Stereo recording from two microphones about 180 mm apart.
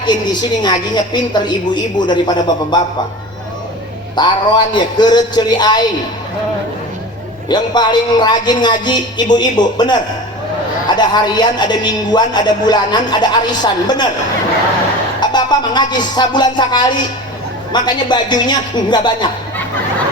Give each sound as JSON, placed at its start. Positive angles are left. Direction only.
{"t": 0.6, "sound": "a man's voice", "side_deg": 25}
{"t": 4.1, "sound": "a man's voice", "side_deg": 25}
{"t": 7.4, "sound": "a man's voice", "side_deg": 25}
{"t": 15.2, "sound": "a man's voice", "side_deg": 25}